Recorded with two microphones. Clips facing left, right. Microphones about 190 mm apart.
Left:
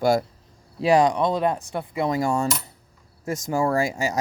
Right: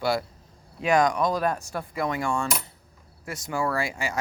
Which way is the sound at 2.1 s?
40° left (ahead or behind).